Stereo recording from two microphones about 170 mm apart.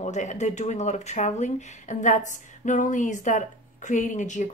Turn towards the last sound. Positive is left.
turn(degrees=45)  # may be behind; listen again after turning